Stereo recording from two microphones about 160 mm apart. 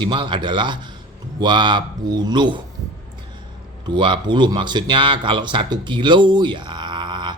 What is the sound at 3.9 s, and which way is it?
Speech, 30° right (ahead or behind).